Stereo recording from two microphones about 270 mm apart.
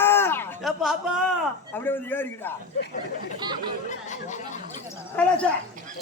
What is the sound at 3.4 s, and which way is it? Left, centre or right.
Speech, centre.